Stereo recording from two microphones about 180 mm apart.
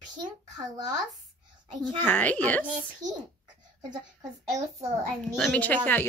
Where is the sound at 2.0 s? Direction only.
10° left (ahead or behind).